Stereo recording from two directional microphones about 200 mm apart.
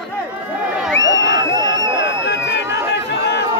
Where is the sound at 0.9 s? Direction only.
65° left (ahead or behind).